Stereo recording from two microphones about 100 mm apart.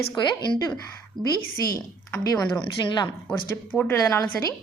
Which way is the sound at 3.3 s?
20° left (ahead or behind).